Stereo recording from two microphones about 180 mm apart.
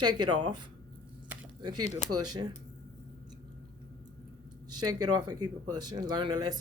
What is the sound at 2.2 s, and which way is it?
Speech, 20° right (ahead or behind).